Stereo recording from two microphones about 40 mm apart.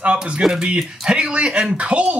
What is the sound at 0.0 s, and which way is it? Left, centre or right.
Speech, right.